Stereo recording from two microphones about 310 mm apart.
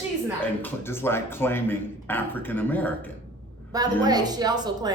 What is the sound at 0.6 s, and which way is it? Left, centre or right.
Speech, centre.